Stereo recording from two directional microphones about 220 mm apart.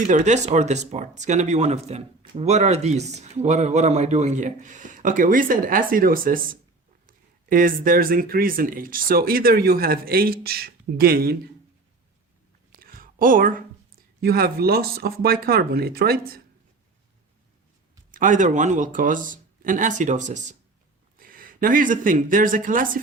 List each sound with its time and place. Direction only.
0.1 s speech: 30° right (ahead or behind)
12.7 s a sound: 40° right (ahead or behind)
14.2 s speech: 45° right (ahead or behind)
18.1 s speech: 35° right (ahead or behind)